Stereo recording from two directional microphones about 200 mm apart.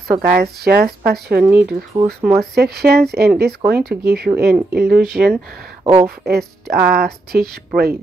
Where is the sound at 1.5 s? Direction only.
10° right (ahead or behind).